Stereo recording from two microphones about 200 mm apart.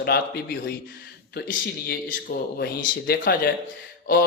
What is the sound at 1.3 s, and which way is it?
A man's voice, 50° left (ahead or behind).